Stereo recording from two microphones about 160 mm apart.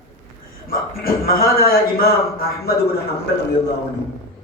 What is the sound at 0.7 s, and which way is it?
A man's voice, 65° left (ahead or behind).